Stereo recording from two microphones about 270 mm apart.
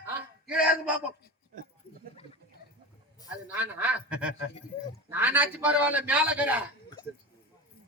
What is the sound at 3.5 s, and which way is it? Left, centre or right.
Speech, centre.